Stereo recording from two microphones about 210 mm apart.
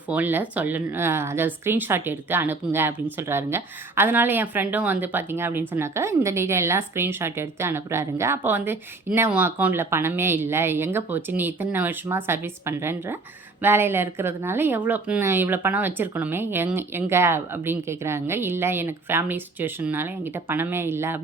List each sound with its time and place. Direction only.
0.1 s speech: 10° right (ahead or behind)